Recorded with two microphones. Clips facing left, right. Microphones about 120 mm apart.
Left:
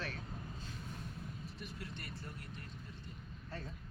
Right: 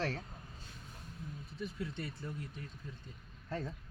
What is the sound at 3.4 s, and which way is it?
Speech, 85° right.